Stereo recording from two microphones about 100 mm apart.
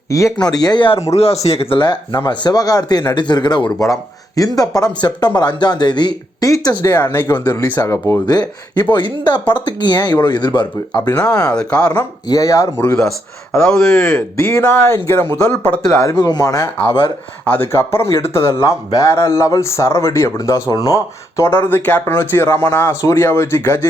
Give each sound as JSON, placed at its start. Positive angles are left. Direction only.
{"t": 0.1, "sound": "speech", "side_deg": 30}
{"t": 0.4, "sound": "speech", "side_deg": 45}
{"t": 1.1, "sound": "speech", "side_deg": 90}
{"t": 1.8, "sound": "speech", "side_deg": 50}
{"t": 6.8, "sound": "a man's voice", "side_deg": 20}
{"t": 7.5, "sound": "a man's voice", "side_deg": 35}
{"t": 8.3, "sound": "speech", "side_deg": 45}
{"t": 11.5, "sound": "speech", "side_deg": 10}
{"t": 12.3, "sound": "speech", "side_deg": 35}
{"t": 12.9, "sound": "speech", "side_deg": 5}
{"t": 14.8, "sound": "a man's voice", "side_deg": 25}
{"t": 16.0, "sound": "speech", "side_deg": 40}
{"t": 16.8, "sound": "speech", "side_deg": 55}
{"t": 17.4, "sound": "a man's voice", "side_deg": 15}